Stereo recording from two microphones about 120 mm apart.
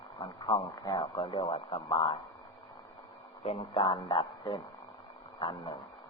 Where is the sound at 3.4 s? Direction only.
50° left (ahead or behind).